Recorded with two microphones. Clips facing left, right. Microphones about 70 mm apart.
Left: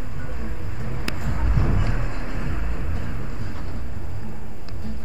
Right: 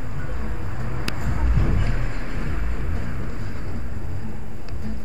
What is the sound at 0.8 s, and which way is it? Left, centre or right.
Vehicle, centre.